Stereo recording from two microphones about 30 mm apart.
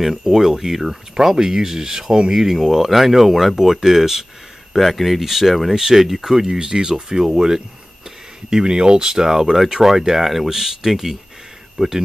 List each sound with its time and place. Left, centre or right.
0.0 s speech: centre
4.7 s speech: centre
5.2 s speech: centre
5.8 s speech: centre